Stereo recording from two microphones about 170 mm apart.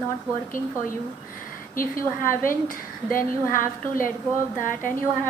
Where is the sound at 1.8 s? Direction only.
55° left (ahead or behind).